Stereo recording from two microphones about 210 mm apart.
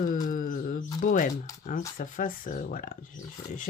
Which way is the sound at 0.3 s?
40° left (ahead or behind).